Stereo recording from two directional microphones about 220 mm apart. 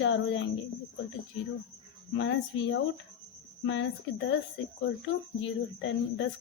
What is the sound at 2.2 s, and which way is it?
A woman's voice, 55° left (ahead or behind).